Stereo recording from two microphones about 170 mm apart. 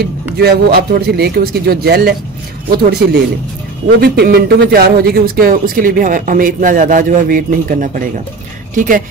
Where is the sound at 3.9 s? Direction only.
70° right (ahead or behind); by 9.0 s 50° right (ahead or behind).